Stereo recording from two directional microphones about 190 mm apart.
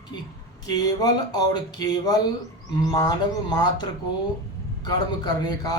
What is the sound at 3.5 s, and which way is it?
Speech, 20° left (ahead or behind).